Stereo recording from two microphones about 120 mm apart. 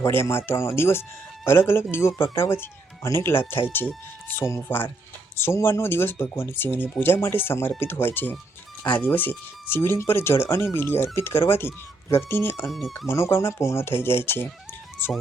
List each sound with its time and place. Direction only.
0.0 s speech: 20° left (ahead or behind)
12.6 s speech: centre (ahead or behind)
13.1 s speech: 20° left (ahead or behind)